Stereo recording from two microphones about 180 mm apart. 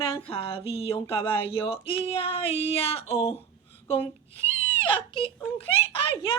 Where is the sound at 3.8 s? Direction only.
30° left (ahead or behind).